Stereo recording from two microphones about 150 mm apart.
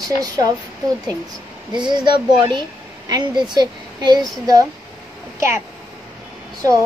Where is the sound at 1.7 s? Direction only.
30° right (ahead or behind).